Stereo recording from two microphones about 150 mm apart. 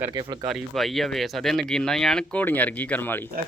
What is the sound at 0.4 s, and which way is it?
Speech, centre (ahead or behind).